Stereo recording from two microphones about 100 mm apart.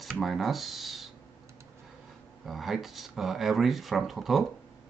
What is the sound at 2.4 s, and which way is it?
Speech, centre (ahead or behind).